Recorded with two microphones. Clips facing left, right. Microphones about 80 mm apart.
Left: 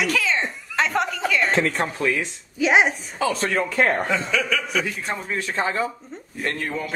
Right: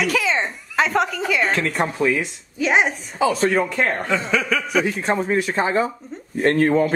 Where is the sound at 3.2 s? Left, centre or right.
Centre.